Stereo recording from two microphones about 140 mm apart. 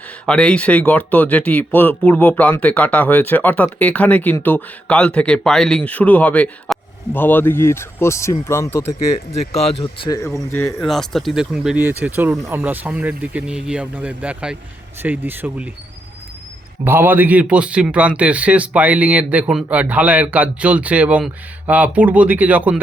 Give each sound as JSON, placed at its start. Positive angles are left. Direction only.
{"t": 0.3, "sound": "speech", "side_deg": 5}
{"t": 9.3, "sound": "speech", "side_deg": 50}
{"t": 9.8, "sound": "speech", "side_deg": 35}
{"t": 10.2, "sound": "speech", "side_deg": 20}
{"t": 10.8, "sound": "a man's voice", "side_deg": 0}
{"t": 16.8, "sound": "a man's voice", "side_deg": -15}